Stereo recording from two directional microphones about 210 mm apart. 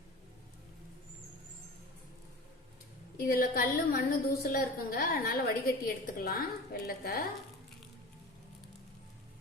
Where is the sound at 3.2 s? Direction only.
45° left (ahead or behind).